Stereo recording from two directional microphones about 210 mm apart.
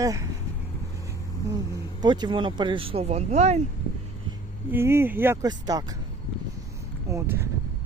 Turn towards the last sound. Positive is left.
turn(degrees=-10)  # may be behind; listen again after turning